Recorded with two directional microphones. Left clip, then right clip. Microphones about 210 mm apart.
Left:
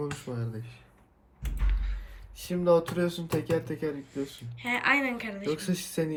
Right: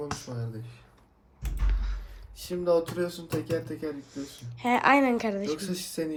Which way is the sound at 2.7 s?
50° left (ahead or behind).